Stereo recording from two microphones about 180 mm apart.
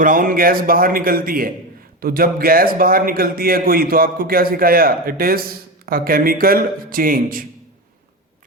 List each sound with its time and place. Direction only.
0.0 s a man's voice: 50° right (ahead or behind)